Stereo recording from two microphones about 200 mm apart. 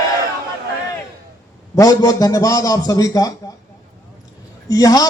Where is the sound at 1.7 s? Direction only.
15° left (ahead or behind).